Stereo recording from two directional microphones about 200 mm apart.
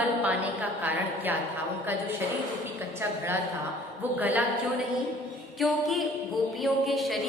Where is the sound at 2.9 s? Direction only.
10° right (ahead or behind).